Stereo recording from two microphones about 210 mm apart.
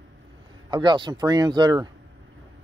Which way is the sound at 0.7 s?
20° right (ahead or behind).